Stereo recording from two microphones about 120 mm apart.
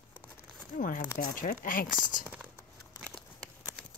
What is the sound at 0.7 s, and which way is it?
Speech, 90° left.